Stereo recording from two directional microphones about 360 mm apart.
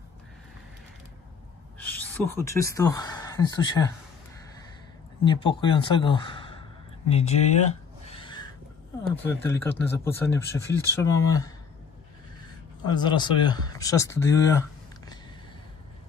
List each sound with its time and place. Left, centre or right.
1.8 s speech: centre
5.2 s a man's voice: centre
8.1 s a sound: centre
9.2 s speech: centre
12.8 s speech: centre